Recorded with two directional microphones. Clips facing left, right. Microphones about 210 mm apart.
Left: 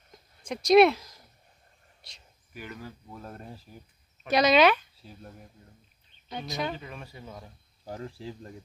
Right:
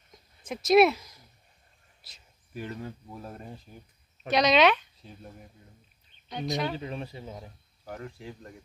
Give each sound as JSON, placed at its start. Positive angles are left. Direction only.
{"t": 0.4, "sound": "speech", "side_deg": -5}
{"t": 2.0, "sound": "a sound", "side_deg": -5}
{"t": 2.5, "sound": "speech", "side_deg": -30}
{"t": 3.1, "sound": "speech", "side_deg": -10}
{"t": 6.8, "sound": "speech", "side_deg": -30}
{"t": 7.8, "sound": "speech", "side_deg": 30}